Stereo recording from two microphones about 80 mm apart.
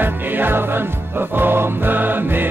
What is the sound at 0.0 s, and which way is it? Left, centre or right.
Music, right.